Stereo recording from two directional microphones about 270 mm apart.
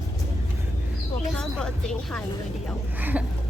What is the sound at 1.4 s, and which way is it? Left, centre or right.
Speech, centre.